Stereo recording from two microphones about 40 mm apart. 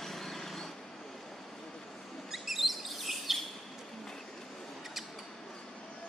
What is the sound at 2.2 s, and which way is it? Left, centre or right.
Chirp, centre.